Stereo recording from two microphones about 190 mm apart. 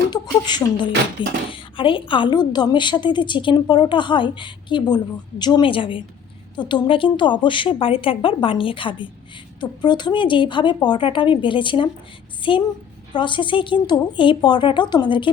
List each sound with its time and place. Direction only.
0.1 s a woman's voice: 25° left (ahead or behind)